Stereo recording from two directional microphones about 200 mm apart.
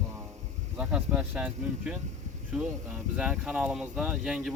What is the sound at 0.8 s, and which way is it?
Speech, 5° right (ahead or behind).